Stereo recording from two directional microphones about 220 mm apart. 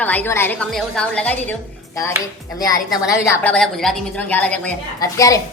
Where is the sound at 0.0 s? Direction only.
5° left (ahead or behind).